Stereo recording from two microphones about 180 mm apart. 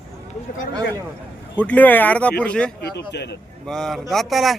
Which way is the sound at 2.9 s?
70° left (ahead or behind).